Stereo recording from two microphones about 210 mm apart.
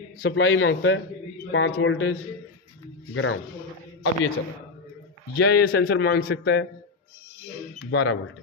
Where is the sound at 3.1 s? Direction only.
65° left (ahead or behind).